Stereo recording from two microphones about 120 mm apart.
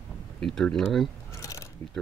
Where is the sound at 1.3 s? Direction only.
25° left (ahead or behind).